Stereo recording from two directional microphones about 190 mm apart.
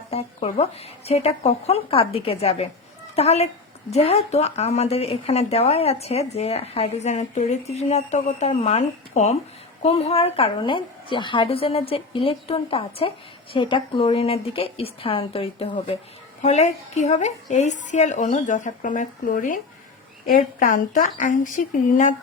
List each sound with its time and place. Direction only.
0.1 s a woman's voice: 30° left (ahead or behind)